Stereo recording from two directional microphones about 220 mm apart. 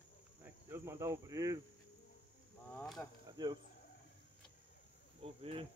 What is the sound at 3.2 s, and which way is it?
Speech, 20° right (ahead or behind).